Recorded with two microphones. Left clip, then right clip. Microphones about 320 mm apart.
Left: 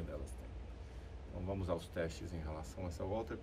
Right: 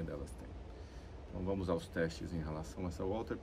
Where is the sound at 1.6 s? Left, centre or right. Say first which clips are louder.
Right 2 dB; centre.